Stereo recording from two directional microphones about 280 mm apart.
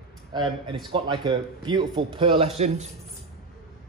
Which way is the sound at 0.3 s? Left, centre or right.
Centre.